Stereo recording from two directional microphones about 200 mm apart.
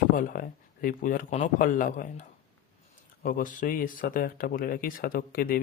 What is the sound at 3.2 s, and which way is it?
Speech, 45° left (ahead or behind).